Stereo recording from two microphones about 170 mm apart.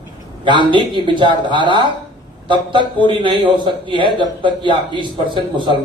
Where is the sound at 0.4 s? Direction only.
30° right (ahead or behind).